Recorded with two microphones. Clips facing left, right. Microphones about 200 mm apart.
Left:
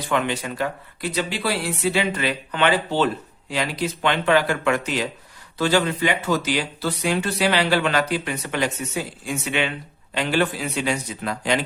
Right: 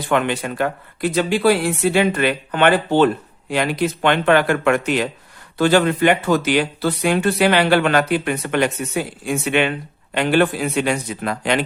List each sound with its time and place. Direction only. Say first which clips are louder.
0.1 s speech: right 4 dB; 60° right (ahead or behind)